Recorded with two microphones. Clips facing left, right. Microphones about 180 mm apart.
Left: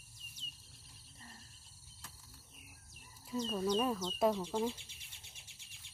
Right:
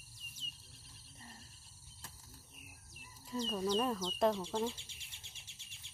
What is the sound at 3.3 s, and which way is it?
Speech, centre (ahead or behind).